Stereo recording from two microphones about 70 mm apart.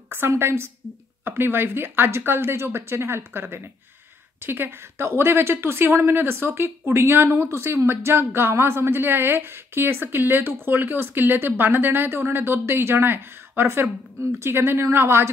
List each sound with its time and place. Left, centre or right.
0.1 s speech: right